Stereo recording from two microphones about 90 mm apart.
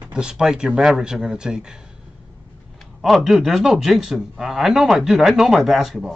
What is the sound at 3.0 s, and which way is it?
A man's voice, centre (ahead or behind).